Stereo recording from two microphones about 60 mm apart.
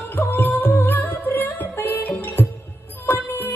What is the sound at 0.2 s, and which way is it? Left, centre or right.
Music, left.